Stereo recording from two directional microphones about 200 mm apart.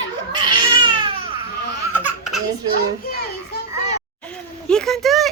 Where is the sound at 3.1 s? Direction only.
50° left (ahead or behind).